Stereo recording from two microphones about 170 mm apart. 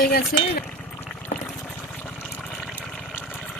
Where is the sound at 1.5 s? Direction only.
5° left (ahead or behind).